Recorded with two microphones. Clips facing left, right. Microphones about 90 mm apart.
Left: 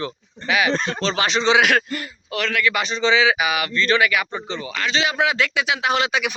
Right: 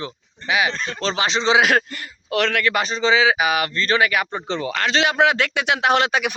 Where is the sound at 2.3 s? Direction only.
60° right (ahead or behind).